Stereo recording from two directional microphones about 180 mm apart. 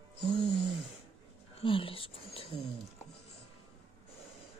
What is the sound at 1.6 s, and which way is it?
Speech, 30° left (ahead or behind).